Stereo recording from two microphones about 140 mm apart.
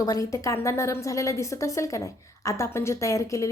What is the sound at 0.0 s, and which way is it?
A woman's voice, 25° left (ahead or behind).